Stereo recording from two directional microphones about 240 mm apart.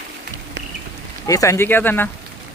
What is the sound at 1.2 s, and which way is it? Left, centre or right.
Speech, centre.